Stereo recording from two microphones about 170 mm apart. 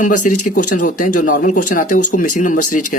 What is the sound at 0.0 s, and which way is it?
Speech, 50° left (ahead or behind).